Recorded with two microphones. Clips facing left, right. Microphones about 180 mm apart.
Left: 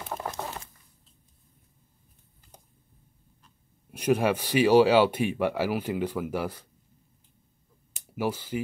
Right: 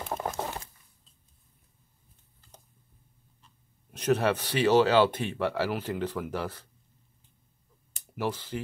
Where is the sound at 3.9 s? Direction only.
10° left (ahead or behind).